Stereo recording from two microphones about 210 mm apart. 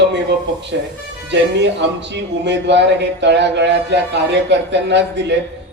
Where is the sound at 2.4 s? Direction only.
55° right (ahead or behind).